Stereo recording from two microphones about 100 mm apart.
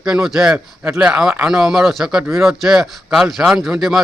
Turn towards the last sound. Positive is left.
turn(degrees=-5)  # may be behind; listen again after turning